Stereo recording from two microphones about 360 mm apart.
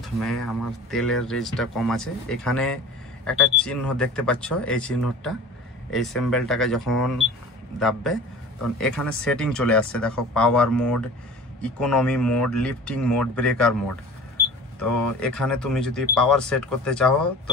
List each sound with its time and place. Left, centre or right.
0.0 s speech: centre